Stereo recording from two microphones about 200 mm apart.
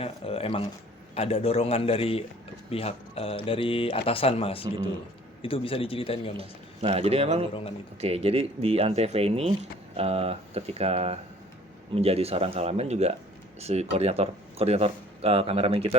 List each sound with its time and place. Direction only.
0.0 s speech: 30° left (ahead or behind)
6.3 s speech: 30° right (ahead or behind)